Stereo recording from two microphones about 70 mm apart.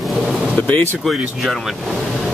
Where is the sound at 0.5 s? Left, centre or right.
Centre.